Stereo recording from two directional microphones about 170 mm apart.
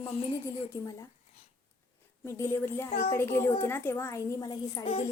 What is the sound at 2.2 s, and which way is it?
A woman's voice, 15° left (ahead or behind).